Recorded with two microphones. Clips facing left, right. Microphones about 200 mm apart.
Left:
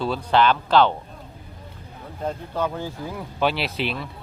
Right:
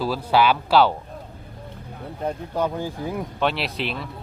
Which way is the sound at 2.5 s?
15° right (ahead or behind).